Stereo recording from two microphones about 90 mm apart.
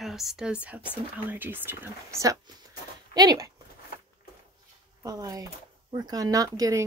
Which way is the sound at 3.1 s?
45° right (ahead or behind).